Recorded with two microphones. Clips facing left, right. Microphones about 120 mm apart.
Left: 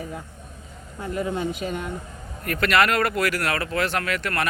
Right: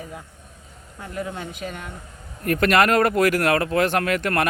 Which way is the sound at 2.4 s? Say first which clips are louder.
Right 3 dB; 45° right (ahead or behind).